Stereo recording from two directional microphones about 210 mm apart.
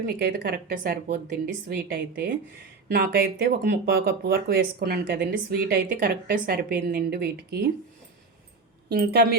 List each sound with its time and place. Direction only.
0.2 s speech: 45° right (ahead or behind)
8.9 s speech: 45° right (ahead or behind)